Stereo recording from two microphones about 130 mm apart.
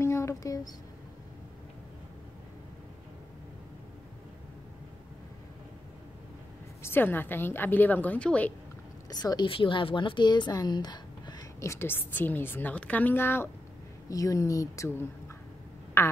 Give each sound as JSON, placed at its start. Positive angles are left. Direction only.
{"t": 0.0, "sound": "a sound", "side_deg": 20}
{"t": 6.8, "sound": "a woman's voice", "side_deg": 15}
{"t": 9.1, "sound": "a woman's voice", "side_deg": 30}